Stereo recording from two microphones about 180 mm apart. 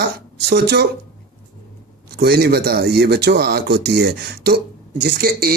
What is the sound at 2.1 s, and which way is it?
Speech, 60° right (ahead or behind).